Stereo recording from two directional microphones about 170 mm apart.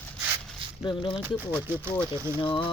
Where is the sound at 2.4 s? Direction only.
30° left (ahead or behind).